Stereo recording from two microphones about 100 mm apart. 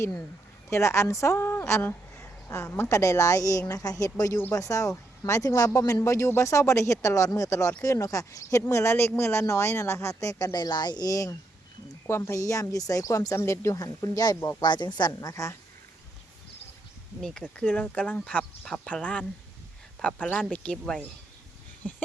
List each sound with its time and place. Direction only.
0.7 s a woman's voice: 25° left (ahead or behind)
3.0 s speech: 30° left (ahead or behind)
14.6 s a woman's voice: 50° left (ahead or behind)
17.2 s speech: 5° left (ahead or behind)
17.6 s speech: 15° left (ahead or behind)